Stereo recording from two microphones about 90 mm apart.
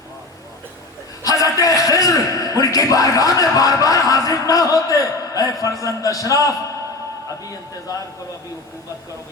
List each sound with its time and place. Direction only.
1.2 s a man's voice: 40° left (ahead or behind)